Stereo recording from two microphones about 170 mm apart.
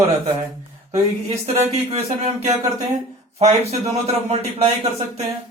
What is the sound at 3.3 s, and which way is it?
Speech, 40° right (ahead or behind).